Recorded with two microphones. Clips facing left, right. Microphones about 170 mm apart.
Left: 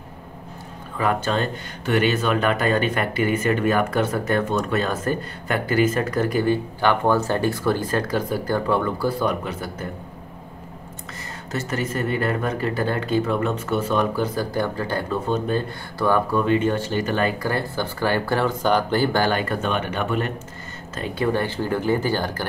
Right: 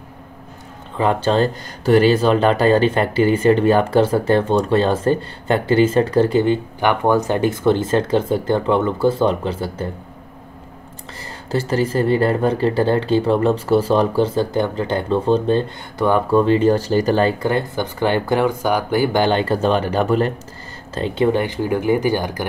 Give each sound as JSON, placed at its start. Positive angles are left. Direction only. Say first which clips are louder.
{"t": 0.9, "sound": "speech", "louder": "right 6 dB", "side_deg": -30}
{"t": 11.5, "sound": "speech", "louder": "right 7 dB", "side_deg": -30}